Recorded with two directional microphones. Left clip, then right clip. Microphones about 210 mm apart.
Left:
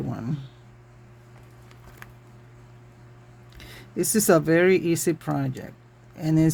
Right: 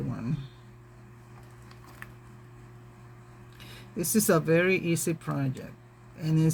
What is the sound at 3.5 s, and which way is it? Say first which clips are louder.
Speech: left 7 dB; 50° left (ahead or behind).